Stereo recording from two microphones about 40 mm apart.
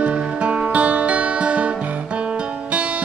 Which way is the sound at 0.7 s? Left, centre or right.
Right.